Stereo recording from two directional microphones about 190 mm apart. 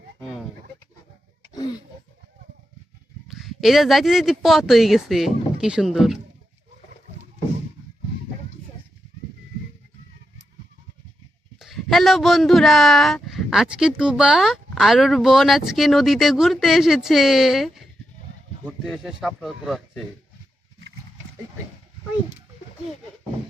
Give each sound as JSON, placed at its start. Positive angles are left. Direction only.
{"t": 3.2, "sound": "speech", "side_deg": 0}
{"t": 11.6, "sound": "speech", "side_deg": 0}